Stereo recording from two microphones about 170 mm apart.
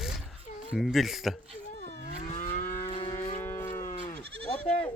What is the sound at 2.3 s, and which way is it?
Livestock, 45° left (ahead or behind).